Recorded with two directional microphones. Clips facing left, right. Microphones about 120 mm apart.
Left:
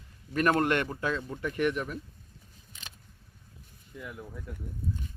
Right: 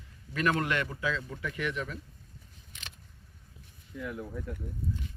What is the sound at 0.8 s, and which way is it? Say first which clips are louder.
Speech: left 2 dB; 30° left (ahead or behind).